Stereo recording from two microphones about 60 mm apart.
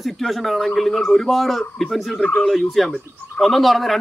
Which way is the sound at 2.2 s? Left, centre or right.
Centre.